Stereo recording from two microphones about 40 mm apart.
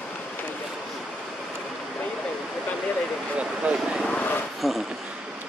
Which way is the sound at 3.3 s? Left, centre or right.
Right.